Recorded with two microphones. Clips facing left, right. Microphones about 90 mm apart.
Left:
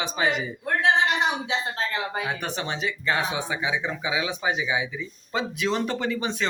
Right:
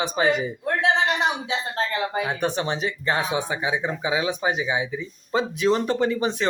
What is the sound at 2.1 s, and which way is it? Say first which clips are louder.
Speech: right 5 dB; 25° right (ahead or behind).